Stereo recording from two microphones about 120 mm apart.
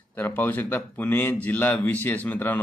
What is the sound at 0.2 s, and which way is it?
A man's voice, 15° left (ahead or behind).